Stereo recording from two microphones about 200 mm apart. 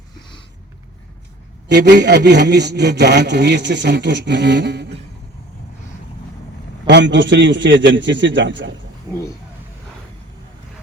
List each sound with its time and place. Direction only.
1.6 s a man's voice: 55° right (ahead or behind)
6.8 s a man's voice: 65° right (ahead or behind)